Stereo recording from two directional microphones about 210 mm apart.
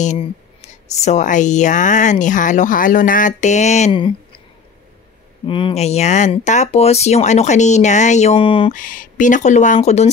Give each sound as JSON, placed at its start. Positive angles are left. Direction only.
{"t": 0.0, "sound": "a woman's voice", "side_deg": 35}
{"t": 5.5, "sound": "a woman's voice", "side_deg": 25}
{"t": 8.7, "sound": "a woman's voice", "side_deg": 40}